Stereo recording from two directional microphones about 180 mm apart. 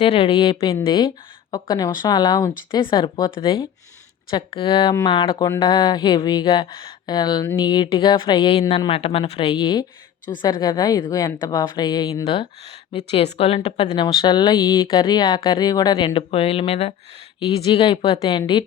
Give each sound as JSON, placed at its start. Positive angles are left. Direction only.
{"t": 0.0, "sound": "speech", "side_deg": 30}
{"t": 12.2, "sound": "speech", "side_deg": 35}